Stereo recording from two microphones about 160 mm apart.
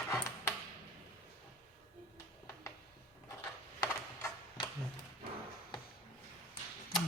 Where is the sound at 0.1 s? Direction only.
20° left (ahead or behind).